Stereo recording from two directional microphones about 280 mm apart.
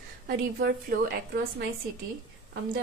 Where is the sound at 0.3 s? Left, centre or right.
Right.